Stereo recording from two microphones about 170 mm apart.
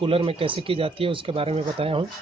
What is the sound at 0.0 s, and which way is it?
Speech, 30° right (ahead or behind).